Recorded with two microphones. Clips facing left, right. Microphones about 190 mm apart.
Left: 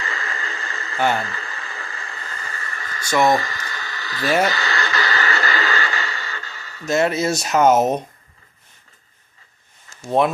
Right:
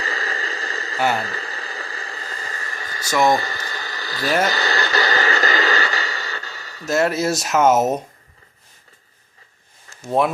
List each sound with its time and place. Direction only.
0.0 s a sound: 35° right (ahead or behind)
3.1 s speech: centre (ahead or behind)
3.3 s a sound: 30° right (ahead or behind)
4.4 s radio: 35° right (ahead or behind)
6.8 s speech: centre (ahead or behind)
10.1 s speech: 5° right (ahead or behind)